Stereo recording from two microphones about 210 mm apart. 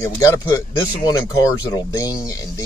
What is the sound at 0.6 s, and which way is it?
Speech, 15° left (ahead or behind).